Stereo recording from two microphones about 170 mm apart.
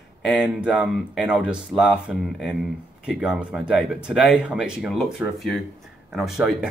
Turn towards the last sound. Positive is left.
turn(degrees=0)  # may be behind; listen again after turning